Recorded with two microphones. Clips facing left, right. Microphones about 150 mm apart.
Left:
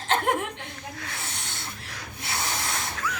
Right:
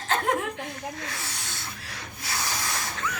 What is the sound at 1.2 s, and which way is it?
Snake, 25° left (ahead or behind).